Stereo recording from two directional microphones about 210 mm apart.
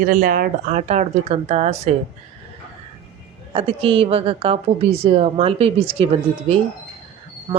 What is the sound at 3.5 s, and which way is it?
A woman's voice, 25° right (ahead or behind).